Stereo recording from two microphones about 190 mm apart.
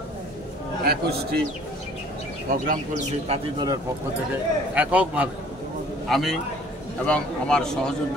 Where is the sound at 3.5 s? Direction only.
20° right (ahead or behind).